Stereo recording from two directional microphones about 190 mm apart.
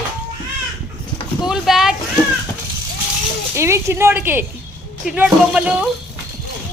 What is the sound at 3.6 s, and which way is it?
A woman's voice, 15° right (ahead or behind).